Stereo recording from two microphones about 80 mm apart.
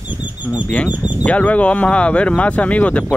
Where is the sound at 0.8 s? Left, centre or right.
Centre.